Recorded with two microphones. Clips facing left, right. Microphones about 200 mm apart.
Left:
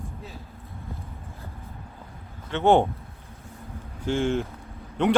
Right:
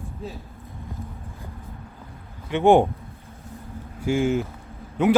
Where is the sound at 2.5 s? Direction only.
15° right (ahead or behind).